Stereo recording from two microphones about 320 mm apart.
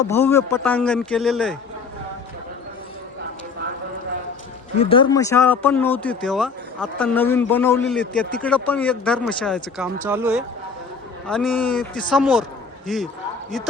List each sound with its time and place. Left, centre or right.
0.1 s speech: centre
4.8 s speech: centre